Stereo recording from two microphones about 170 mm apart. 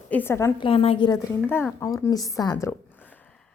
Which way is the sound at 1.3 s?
10° left (ahead or behind).